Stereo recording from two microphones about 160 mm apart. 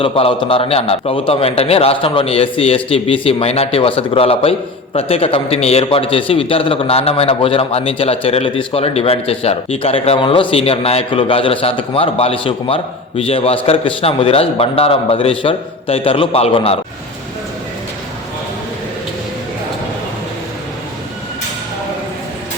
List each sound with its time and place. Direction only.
0.0 s a man's voice: 35° left (ahead or behind)